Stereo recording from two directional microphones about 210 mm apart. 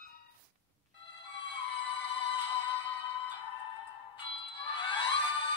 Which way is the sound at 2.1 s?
20° left (ahead or behind).